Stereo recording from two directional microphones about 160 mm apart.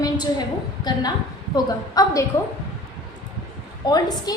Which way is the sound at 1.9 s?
20° left (ahead or behind).